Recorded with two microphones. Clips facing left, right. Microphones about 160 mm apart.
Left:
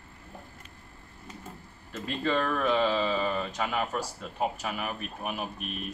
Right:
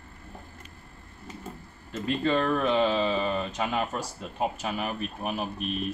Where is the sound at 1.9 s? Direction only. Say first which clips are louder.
Right 3 dB; 20° right (ahead or behind).